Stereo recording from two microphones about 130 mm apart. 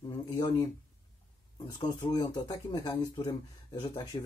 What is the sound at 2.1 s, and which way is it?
Speech, 30° left (ahead or behind).